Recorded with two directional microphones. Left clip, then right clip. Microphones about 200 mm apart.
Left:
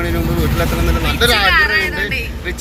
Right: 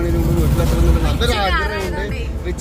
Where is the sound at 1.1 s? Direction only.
Centre (ahead or behind).